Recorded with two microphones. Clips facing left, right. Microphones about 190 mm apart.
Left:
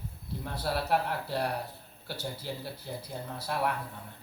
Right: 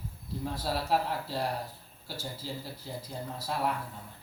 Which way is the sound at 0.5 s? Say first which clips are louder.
Left 1 dB; 65° left (ahead or behind).